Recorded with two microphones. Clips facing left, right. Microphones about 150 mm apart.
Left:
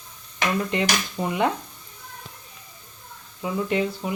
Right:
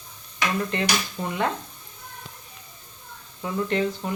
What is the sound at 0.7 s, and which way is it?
Speech, 15° left (ahead or behind).